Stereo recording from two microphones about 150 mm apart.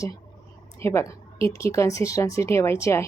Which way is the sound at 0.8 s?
15° left (ahead or behind).